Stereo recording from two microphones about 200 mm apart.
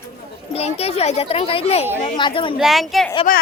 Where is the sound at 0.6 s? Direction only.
30° left (ahead or behind).